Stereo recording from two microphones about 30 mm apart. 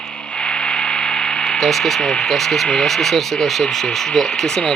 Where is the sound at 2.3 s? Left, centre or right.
Centre.